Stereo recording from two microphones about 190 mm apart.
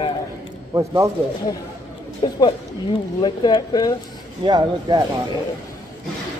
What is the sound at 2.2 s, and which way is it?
Speech, 25° left (ahead or behind).